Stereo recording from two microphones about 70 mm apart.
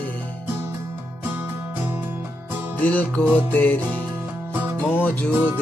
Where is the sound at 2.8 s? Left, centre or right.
Left.